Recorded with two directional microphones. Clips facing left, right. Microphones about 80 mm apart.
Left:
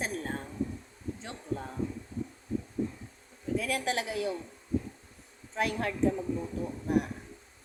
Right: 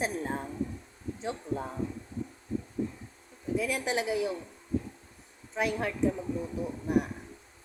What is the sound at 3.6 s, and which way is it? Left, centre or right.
Speech, centre.